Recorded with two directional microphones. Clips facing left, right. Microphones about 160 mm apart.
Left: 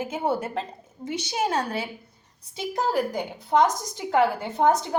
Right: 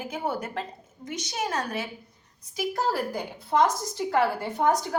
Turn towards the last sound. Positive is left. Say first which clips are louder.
# left 3 dB
turn(degrees=20)  # may be behind; listen again after turning